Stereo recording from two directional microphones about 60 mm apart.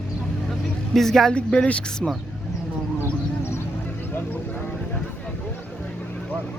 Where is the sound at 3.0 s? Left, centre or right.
Left.